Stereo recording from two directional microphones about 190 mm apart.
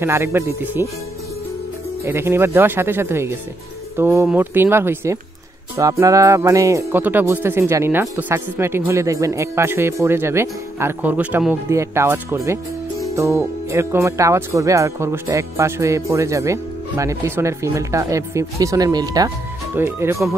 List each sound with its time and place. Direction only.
0.0 s speech: 15° right (ahead or behind)
2.0 s speech: 15° right (ahead or behind)